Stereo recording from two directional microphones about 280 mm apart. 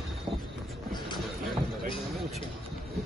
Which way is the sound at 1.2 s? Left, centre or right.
Centre.